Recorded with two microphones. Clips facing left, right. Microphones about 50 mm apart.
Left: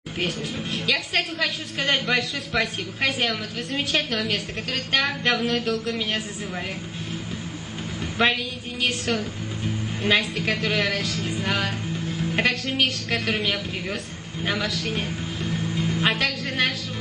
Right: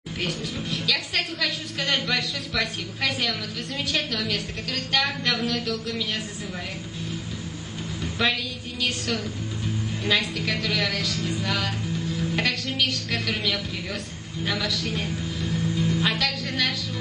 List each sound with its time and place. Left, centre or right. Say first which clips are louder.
1.1 s a woman's voice: left 2 dB; left
8.0 s a sound: left 3 dB; left
8.8 s a woman's voice: left 3 dB; left
11.4 s a woman's voice: left 2 dB; left
14.8 s music: left 1 dB; left